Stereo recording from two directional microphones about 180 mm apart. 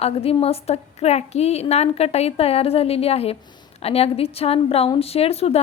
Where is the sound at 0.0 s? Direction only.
35° left (ahead or behind).